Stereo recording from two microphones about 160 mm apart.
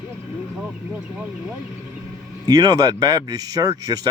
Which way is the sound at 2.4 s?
25° right (ahead or behind).